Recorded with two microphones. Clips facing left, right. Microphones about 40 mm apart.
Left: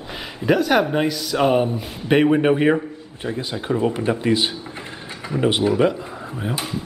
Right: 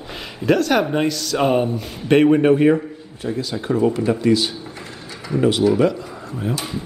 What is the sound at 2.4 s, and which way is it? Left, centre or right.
Speech, centre.